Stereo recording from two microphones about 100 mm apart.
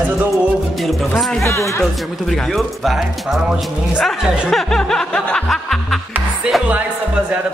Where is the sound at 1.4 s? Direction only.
30° left (ahead or behind).